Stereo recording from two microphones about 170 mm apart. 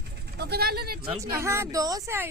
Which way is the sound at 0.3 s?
70° right (ahead or behind).